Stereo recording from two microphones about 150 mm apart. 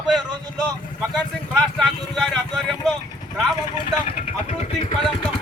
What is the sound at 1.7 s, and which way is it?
A man's voice, centre (ahead or behind).